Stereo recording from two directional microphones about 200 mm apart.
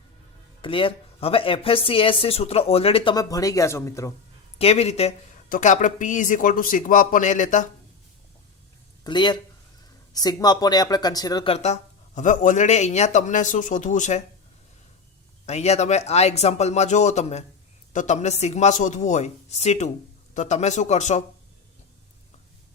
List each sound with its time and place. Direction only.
0.6 s speech: 25° left (ahead or behind)
4.5 s speech: 30° left (ahead or behind)
9.0 s speech: 20° left (ahead or behind); by 14.2 s 40° left (ahead or behind)
15.4 s speech: 35° left (ahead or behind)